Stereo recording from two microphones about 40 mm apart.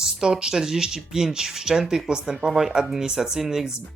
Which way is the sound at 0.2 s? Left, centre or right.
Centre.